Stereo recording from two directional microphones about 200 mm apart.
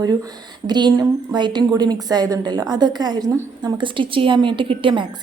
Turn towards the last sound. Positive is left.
turn(degrees=-25)  # may be behind; listen again after turning